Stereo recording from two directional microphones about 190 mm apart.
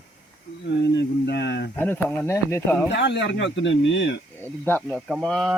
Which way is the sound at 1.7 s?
10° left (ahead or behind).